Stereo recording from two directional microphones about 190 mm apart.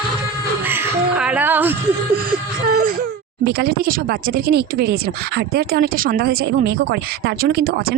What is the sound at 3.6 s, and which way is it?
Speech, 50° right (ahead or behind).